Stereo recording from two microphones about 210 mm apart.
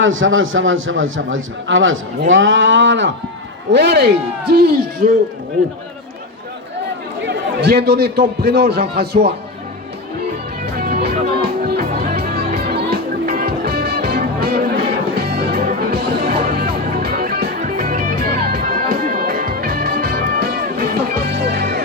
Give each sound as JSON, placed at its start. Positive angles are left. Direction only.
{"t": 0.0, "sound": "a man's voice", "side_deg": -70}
{"t": 2.3, "sound": "a sound", "side_deg": -65}
{"t": 3.7, "sound": "a man's voice", "side_deg": -55}
{"t": 7.3, "sound": "a man's voice", "side_deg": -50}
{"t": 10.8, "sound": "music", "side_deg": -45}